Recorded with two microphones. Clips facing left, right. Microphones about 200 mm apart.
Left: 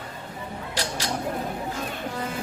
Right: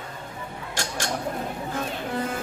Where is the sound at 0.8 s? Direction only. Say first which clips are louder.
Even; 50° right (ahead or behind).